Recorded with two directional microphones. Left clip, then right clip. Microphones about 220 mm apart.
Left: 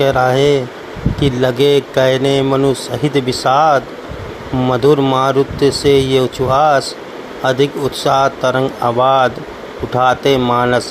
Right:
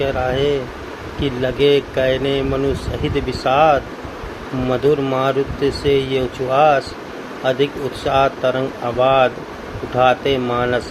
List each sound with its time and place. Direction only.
0.0 s speech: 35° left (ahead or behind)